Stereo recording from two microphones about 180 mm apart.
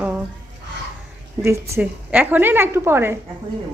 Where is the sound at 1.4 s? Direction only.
15° right (ahead or behind).